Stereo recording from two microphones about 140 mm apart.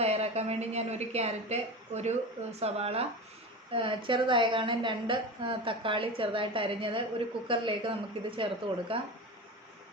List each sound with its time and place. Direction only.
0.0 s a woman's voice: 50° right (ahead or behind)